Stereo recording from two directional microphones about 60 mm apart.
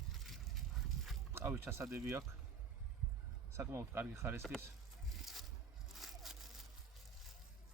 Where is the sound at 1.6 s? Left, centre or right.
Right.